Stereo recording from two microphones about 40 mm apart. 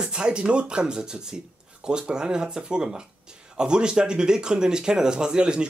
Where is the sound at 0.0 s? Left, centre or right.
Right.